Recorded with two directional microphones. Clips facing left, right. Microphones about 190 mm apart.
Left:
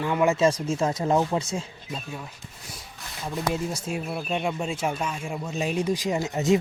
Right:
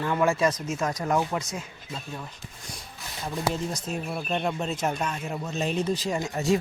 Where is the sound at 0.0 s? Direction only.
15° left (ahead or behind).